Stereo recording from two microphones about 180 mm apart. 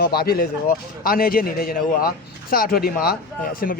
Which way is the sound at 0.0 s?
60° left (ahead or behind).